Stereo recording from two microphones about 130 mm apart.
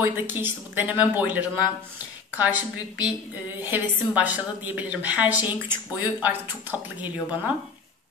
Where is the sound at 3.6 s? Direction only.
15° right (ahead or behind).